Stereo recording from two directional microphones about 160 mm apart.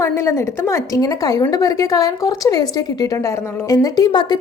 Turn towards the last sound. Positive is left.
turn(degrees=25)  # may be behind; listen again after turning